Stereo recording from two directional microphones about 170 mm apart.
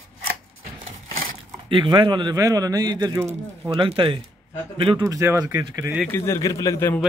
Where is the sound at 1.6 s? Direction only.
30° right (ahead or behind).